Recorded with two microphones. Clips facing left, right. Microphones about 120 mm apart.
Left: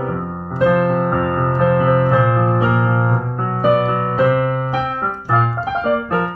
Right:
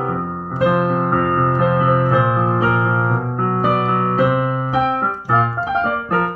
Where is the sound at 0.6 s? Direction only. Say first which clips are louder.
Left 2 dB; 15° right (ahead or behind).